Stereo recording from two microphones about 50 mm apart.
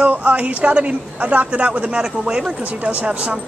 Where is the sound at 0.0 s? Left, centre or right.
Right.